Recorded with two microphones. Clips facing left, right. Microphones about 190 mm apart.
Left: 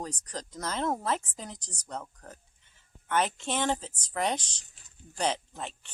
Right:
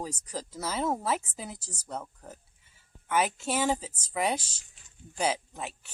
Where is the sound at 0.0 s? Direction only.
5° right (ahead or behind).